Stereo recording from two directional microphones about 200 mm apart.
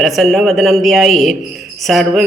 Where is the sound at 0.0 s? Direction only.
Centre (ahead or behind).